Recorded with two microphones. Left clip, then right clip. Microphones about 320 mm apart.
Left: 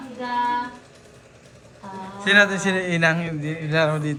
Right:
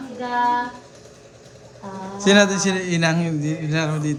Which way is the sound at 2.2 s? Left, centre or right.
Centre.